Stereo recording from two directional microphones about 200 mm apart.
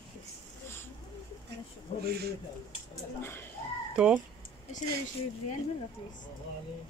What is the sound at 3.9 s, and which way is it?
Speech, 5° right (ahead or behind).